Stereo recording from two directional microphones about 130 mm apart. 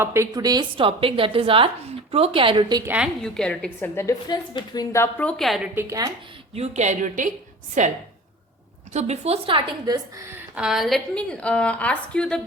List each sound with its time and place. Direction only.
0.0 s a woman's voice: 20° right (ahead or behind); by 2.8 s 35° right (ahead or behind)
2.8 s a woman's voice: 10° right (ahead or behind)
3.2 s a woman's voice: 5° left (ahead or behind)
3.8 s a woman's voice: 20° left (ahead or behind)
4.3 s a woman's voice: 30° left (ahead or behind)
5.2 s a woman's voice: centre (ahead or behind)
5.7 s a woman's voice: 25° right (ahead or behind)
6.5 s a woman's voice: 55° right (ahead or behind)
8.9 s a woman's voice: 60° right (ahead or behind); by 10.0 s 35° right (ahead or behind)
10.3 s a woman's voice: 10° right (ahead or behind); by 12.4 s 10° left (ahead or behind)